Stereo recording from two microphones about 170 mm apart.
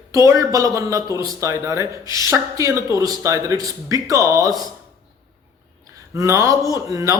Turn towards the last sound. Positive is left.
turn(degrees=-20)  # may be behind; listen again after turning